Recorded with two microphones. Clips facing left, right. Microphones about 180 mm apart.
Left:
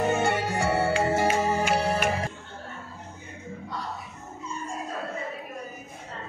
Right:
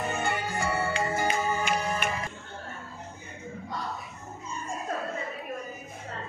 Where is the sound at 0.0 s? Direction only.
80° left.